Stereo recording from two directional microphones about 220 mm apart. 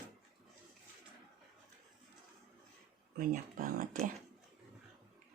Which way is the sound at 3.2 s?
35° right (ahead or behind).